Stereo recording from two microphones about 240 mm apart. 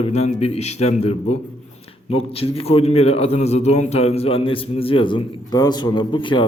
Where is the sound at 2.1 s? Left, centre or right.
Left.